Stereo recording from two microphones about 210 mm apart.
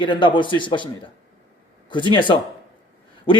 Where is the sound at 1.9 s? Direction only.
20° left (ahead or behind).